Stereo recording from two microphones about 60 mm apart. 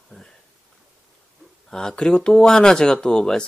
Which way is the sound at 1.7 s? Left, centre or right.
Centre.